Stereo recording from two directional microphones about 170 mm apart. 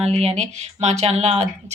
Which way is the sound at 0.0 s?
35° right (ahead or behind).